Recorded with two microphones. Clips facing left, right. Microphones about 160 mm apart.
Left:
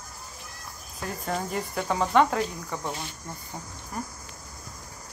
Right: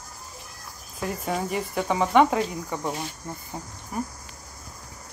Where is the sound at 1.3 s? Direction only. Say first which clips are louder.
Right 1 dB; 5° right (ahead or behind).